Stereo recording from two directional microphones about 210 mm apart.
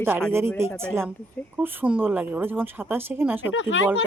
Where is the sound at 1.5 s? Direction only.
10° right (ahead or behind).